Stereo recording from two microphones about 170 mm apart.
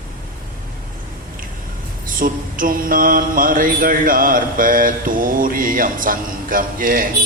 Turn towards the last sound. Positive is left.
turn(degrees=-55)  # may be behind; listen again after turning